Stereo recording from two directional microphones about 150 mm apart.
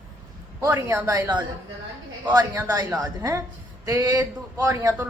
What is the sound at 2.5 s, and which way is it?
A man's voice, 20° right (ahead or behind).